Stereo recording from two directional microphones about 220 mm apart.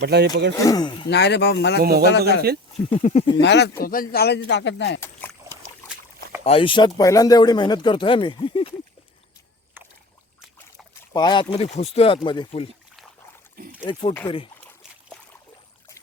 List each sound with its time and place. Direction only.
0.0 s speech: 50° right (ahead or behind)
0.5 s speech: 15° left (ahead or behind)
1.1 s speech: 50° left (ahead or behind)
1.8 s speech: 45° right (ahead or behind)
2.9 s speech: 30° left (ahead or behind)
3.4 s speech: 50° left (ahead or behind)
4.9 s speech: 10° left (ahead or behind)
6.4 s speech: 25° left (ahead or behind)
9.8 s rowboat: 10° right (ahead or behind)
11.1 s speech: 20° left (ahead or behind)
13.8 s speech: 20° left (ahead or behind)